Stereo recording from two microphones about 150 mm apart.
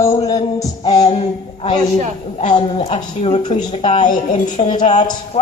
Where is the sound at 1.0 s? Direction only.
40° left (ahead or behind).